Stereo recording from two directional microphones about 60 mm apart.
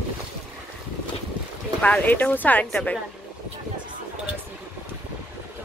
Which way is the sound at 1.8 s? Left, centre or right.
Left.